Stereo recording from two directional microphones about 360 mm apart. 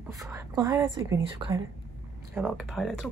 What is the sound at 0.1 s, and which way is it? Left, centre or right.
Speech, centre.